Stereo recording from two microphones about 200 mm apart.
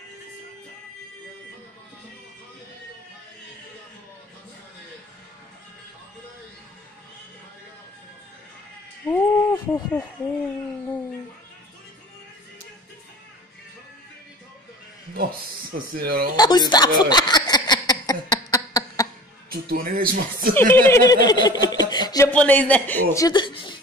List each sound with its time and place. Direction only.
9.0 s a sound: 10° left (ahead or behind)
16.0 s speech: 50° right (ahead or behind)
16.3 s a sound: 20° left (ahead or behind)
19.5 s speech: 45° right (ahead or behind)
20.5 s speech: 10° left (ahead or behind)
22.3 s a man's voice: 5° left (ahead or behind); by 23.8 s 25° left (ahead or behind)